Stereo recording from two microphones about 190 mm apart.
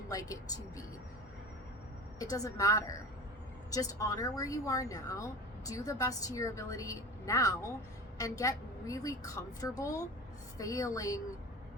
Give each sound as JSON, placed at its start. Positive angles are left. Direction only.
{"t": 0.1, "sound": "a woman's voice", "side_deg": 20}
{"t": 2.1, "sound": "a woman's voice", "side_deg": 20}